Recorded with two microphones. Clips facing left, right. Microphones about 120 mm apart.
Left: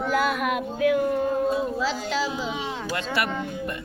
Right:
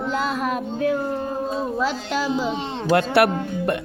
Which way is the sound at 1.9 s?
50° right (ahead or behind).